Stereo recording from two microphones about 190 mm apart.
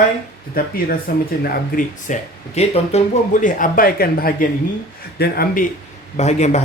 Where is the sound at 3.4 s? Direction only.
45° left (ahead or behind).